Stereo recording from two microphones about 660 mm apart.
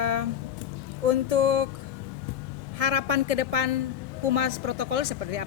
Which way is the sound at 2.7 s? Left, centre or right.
Right.